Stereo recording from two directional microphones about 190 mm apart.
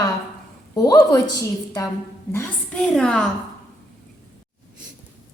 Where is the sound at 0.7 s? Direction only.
20° left (ahead or behind).